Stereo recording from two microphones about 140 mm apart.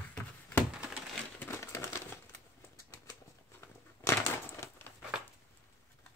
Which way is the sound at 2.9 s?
20° left (ahead or behind).